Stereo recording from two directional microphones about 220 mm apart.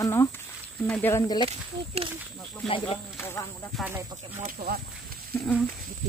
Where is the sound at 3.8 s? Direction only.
10° right (ahead or behind).